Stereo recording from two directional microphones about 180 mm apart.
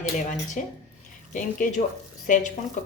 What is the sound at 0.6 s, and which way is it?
Speech, 45° left (ahead or behind).